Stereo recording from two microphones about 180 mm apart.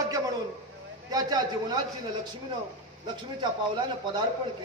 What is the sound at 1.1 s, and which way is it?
Speech, 20° right (ahead or behind).